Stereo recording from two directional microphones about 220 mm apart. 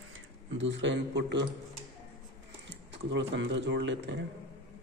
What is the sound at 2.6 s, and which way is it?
Speech, 55° right (ahead or behind).